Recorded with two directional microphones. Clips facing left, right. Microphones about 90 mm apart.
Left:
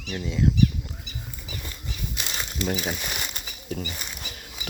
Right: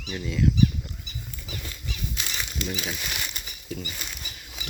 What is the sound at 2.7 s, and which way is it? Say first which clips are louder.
Speech: left 6 dB; 45° left (ahead or behind).